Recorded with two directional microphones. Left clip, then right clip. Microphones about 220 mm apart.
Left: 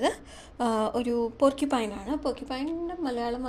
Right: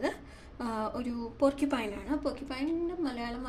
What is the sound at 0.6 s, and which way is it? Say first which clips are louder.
A woman's voice: left 8 dB; 40° left (ahead or behind).